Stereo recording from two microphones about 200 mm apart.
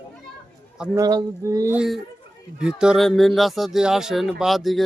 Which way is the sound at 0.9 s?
20° right (ahead or behind).